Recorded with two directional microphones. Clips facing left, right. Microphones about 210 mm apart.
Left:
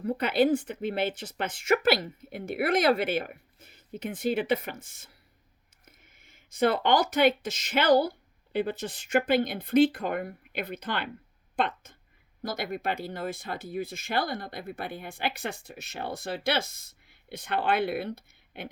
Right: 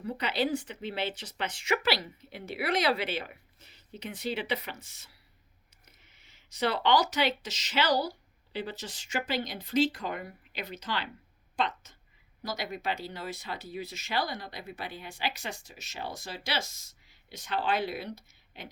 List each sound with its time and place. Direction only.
0.0 s a woman's voice: 50° left (ahead or behind)